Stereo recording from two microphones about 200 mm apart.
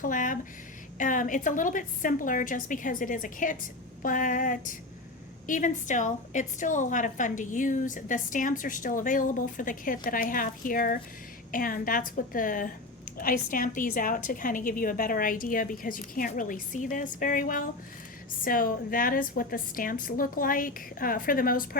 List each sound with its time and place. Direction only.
0.0 s a woman's voice: 40° left (ahead or behind)